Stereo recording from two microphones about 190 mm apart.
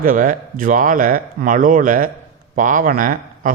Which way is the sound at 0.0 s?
45° right (ahead or behind).